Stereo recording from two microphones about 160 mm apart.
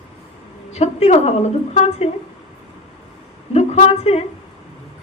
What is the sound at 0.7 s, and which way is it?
A man's voice, 40° left (ahead or behind).